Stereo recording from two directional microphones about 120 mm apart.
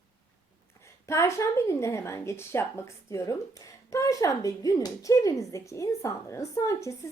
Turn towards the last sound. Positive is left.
turn(degrees=25)  # may be behind; listen again after turning